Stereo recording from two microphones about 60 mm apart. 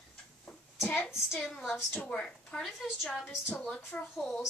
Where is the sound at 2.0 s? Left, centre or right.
Centre.